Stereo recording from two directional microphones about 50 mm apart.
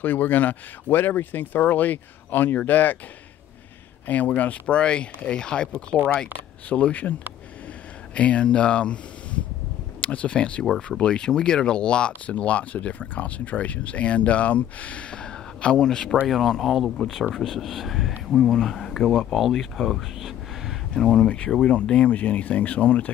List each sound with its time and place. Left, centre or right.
0.0 s speech: left
4.4 s speech: left
5.9 s speech: centre
6.7 s speech: left
16.3 s speech: centre
20.9 s speech: centre
21.8 s speech: left
22.1 s speech: left